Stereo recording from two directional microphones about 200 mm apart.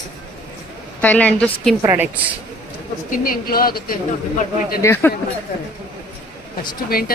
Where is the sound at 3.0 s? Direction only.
45° left (ahead or behind).